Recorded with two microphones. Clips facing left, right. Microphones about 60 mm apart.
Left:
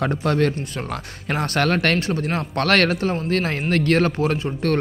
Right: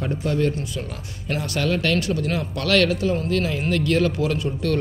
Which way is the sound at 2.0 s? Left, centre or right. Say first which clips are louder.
Even; left.